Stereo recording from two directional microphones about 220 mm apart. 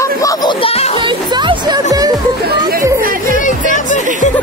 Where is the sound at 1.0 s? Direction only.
20° right (ahead or behind).